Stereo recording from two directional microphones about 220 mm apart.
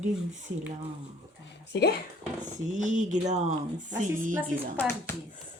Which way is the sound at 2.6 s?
35° right (ahead or behind).